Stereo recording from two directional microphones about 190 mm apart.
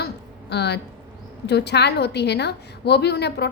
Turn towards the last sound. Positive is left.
turn(degrees=60)  # may be behind; listen again after turning